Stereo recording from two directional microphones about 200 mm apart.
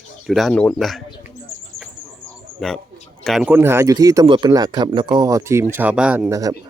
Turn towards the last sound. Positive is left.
turn(degrees=-15)  # may be behind; listen again after turning